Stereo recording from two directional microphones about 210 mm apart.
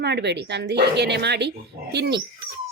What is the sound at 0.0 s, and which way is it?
A woman's voice, 55° right (ahead or behind).